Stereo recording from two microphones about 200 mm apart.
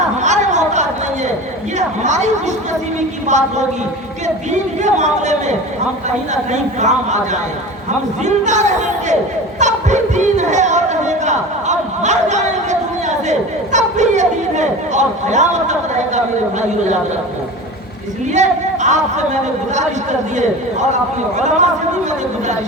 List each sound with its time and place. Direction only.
0.2 s a sound: 35° right (ahead or behind)
2.0 s chatter: 35° right (ahead or behind)
4.8 s speech: 35° right (ahead or behind)
8.2 s speech: 35° right (ahead or behind)
13.7 s speech: 35° right (ahead or behind)
18.3 s speech: 35° right (ahead or behind)
21.3 s speech: 35° right (ahead or behind)